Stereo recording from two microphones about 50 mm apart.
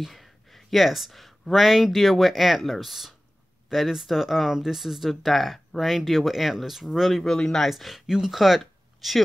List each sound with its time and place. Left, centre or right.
0.0 s speech: centre
7.7 s speech: centre